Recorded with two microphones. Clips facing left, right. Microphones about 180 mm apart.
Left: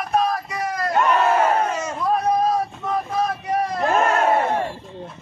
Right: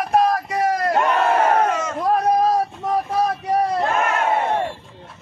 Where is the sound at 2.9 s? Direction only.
35° right (ahead or behind).